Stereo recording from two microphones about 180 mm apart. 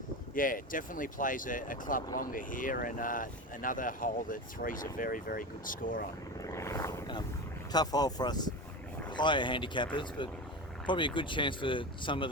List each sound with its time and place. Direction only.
0.3 s speech: 50° left (ahead or behind)
6.4 s wild animals: 15° left (ahead or behind)
7.7 s speech: 20° left (ahead or behind)